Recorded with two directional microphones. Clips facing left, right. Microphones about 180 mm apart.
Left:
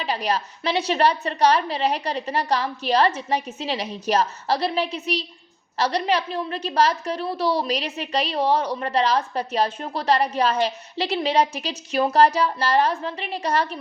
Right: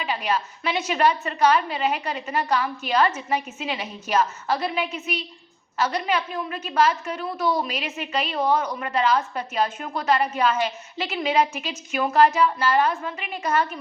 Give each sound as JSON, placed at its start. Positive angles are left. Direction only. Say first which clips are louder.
{"t": 0.0, "sound": "a woman's voice", "louder": "left 1 dB", "side_deg": 40}